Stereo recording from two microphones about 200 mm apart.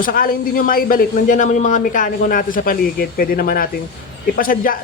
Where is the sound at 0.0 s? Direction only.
45° left (ahead or behind).